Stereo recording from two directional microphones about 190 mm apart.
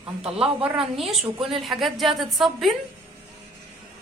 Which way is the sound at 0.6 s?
Centre (ahead or behind).